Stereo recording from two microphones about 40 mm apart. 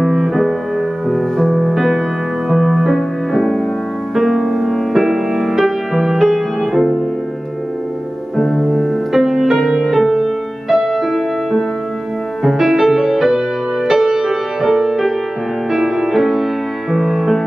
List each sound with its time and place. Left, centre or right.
0.0 s music: centre
1.6 s music: centre
8.4 s music: centre
9.1 s music: centre